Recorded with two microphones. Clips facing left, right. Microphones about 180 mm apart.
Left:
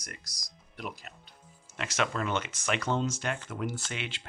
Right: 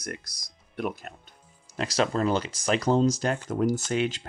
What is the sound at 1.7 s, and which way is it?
Speech, 35° right (ahead or behind).